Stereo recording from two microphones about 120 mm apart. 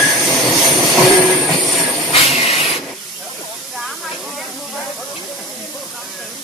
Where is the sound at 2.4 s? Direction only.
55° left (ahead or behind).